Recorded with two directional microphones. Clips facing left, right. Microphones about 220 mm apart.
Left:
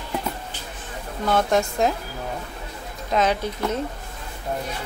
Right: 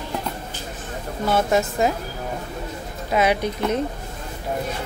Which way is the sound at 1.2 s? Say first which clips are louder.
Right 1 dB; 5° right (ahead or behind).